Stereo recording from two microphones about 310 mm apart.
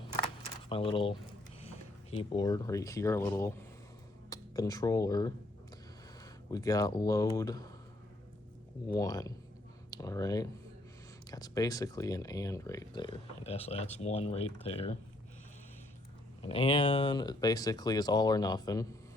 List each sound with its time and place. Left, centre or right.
0.7 s speech: centre
6.5 s speech: centre
9.0 s speech: centre
16.5 s speech: centre